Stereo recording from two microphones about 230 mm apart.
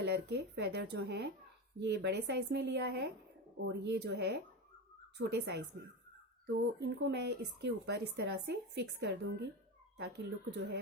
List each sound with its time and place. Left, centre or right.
0.0 s speech: right